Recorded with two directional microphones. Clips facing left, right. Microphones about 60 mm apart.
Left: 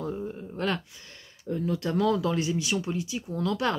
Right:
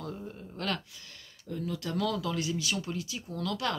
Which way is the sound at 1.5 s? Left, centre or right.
Left.